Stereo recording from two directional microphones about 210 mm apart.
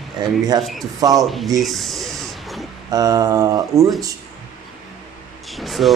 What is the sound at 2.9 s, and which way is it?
Speech, 15° right (ahead or behind).